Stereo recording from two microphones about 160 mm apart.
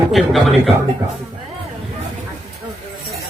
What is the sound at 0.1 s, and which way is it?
Speech, centre (ahead or behind).